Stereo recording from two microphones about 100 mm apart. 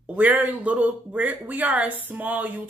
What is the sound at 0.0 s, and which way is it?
Speech, 15° right (ahead or behind).